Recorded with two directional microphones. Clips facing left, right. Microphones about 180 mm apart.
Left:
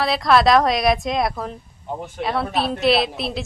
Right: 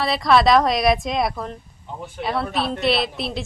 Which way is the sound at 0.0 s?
Centre (ahead or behind).